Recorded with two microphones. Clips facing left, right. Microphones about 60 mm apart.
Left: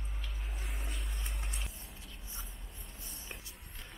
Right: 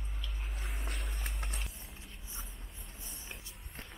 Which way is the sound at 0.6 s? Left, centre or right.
Centre.